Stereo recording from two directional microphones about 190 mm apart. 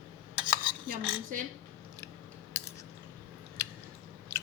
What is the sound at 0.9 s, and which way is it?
Speech, 45° right (ahead or behind).